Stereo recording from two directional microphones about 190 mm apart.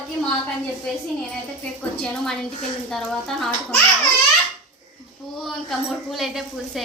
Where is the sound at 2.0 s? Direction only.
Centre (ahead or behind).